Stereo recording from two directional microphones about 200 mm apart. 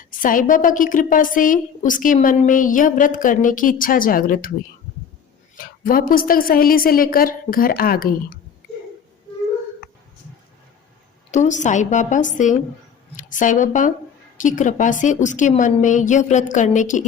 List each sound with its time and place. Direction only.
0.0 s a woman's voice: 40° left (ahead or behind)
5.5 s a woman's voice: 45° left (ahead or behind)
11.3 s a woman's voice: 35° left (ahead or behind)